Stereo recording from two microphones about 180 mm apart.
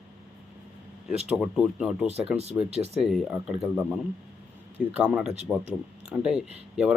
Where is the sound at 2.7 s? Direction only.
35° right (ahead or behind).